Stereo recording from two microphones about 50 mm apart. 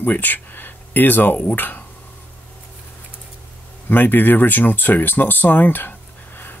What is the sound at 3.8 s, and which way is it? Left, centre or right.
Speech, left.